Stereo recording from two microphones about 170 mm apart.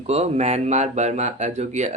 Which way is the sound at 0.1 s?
40° right (ahead or behind).